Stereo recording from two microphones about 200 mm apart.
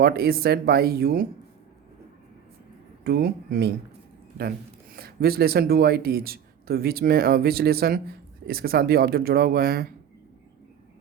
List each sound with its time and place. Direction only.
0.0 s speech: 50° right (ahead or behind)
3.0 s speech: 50° right (ahead or behind)